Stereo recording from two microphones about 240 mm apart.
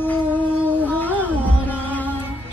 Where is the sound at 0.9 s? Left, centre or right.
Centre.